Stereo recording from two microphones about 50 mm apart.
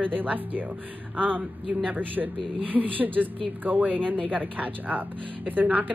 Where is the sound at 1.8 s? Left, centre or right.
Right.